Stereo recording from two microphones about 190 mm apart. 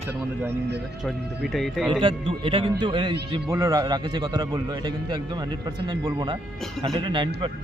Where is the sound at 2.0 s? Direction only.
25° right (ahead or behind).